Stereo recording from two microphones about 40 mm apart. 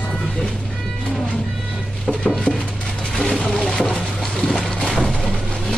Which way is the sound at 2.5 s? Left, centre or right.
Left.